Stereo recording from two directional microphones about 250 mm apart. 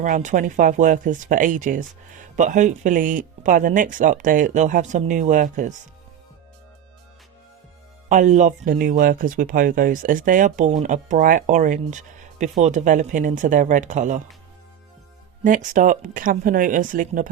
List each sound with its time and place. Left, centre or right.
0.0 s speech: right
8.1 s speech: right
15.4 s speech: right